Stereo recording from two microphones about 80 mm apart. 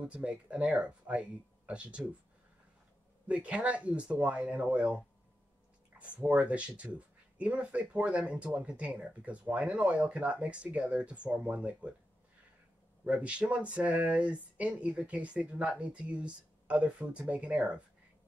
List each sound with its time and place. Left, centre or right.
0.0 s speech: centre
3.3 s speech: centre
13.0 s speech: centre